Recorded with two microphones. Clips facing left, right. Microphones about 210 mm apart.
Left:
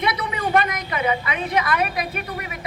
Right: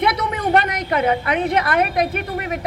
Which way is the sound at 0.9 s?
55° right (ahead or behind).